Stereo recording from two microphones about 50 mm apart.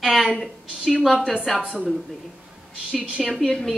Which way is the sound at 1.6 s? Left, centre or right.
Centre.